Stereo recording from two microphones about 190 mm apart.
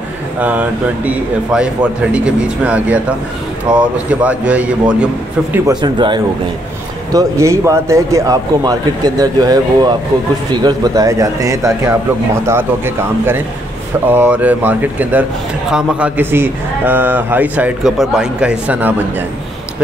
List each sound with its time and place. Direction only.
0.4 s a man's voice: 10° right (ahead or behind)
5.7 s a man's voice: 25° right (ahead or behind)